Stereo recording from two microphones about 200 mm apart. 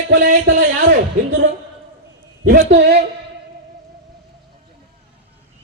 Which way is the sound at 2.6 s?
60° right (ahead or behind).